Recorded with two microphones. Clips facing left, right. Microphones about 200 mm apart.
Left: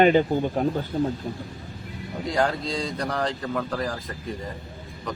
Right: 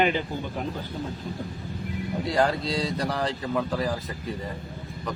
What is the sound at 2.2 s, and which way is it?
Speech, centre (ahead or behind).